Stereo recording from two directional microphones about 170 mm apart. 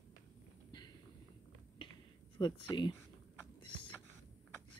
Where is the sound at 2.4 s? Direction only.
25° left (ahead or behind).